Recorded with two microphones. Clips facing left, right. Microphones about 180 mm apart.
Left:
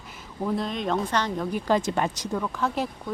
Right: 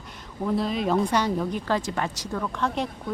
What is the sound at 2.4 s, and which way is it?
Speech, 5° left (ahead or behind).